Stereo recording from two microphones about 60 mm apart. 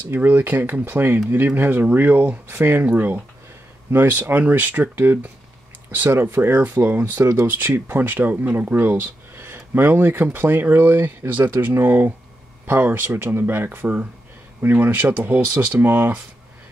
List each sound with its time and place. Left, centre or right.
0.1 s speech: right